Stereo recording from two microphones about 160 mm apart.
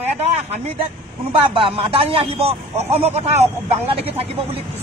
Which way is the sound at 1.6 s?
35° right (ahead or behind).